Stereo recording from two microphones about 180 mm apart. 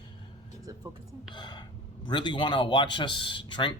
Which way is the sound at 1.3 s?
25° left (ahead or behind).